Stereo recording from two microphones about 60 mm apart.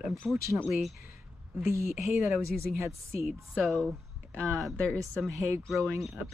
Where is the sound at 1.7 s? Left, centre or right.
Right.